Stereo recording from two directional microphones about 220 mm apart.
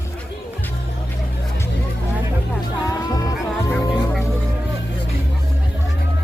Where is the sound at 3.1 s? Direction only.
15° left (ahead or behind).